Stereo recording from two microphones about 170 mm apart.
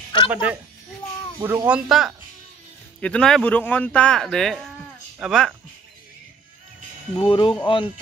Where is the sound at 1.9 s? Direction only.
Centre (ahead or behind).